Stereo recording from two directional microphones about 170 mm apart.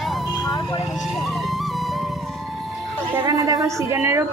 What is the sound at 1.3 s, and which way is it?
Music, centre (ahead or behind).